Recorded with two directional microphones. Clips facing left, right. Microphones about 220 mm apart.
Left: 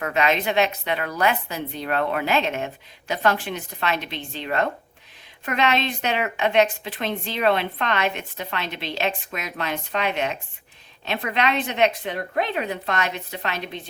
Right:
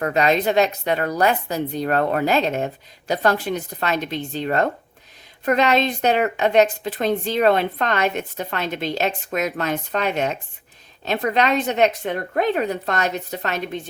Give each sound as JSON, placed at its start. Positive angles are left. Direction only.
{"t": 0.0, "sound": "a woman's voice", "side_deg": -40}